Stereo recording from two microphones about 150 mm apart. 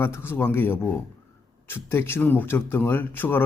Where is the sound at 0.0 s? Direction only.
15° left (ahead or behind).